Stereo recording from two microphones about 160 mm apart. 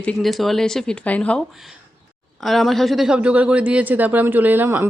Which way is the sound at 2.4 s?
Centre (ahead or behind).